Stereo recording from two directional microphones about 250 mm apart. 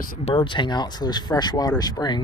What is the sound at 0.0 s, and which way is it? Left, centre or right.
Speech, left.